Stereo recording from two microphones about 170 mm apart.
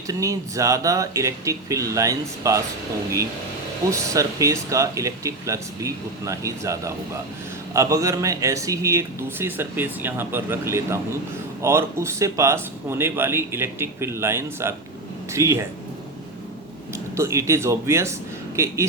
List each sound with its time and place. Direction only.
0.1 s speech: 20° right (ahead or behind)
3.8 s speech: 20° right (ahead or behind)
16.9 s a man's voice: 15° right (ahead or behind)